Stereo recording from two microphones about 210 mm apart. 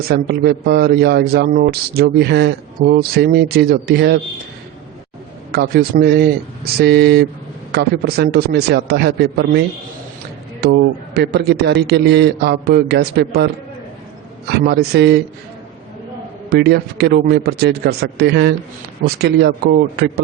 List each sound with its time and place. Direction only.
0.0 s speech: 50° right (ahead or behind)
5.5 s speech: 50° right (ahead or behind)
16.5 s speech: 50° right (ahead or behind)